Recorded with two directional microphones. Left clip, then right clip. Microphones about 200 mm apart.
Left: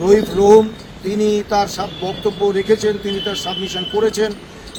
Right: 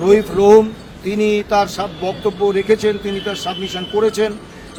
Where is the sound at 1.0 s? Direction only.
40° right (ahead or behind).